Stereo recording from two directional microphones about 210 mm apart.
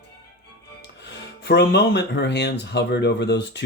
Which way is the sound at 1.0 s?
55° left (ahead or behind).